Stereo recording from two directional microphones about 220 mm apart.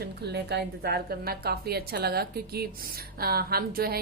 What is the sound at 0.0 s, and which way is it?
A woman's voice, 50° right (ahead or behind).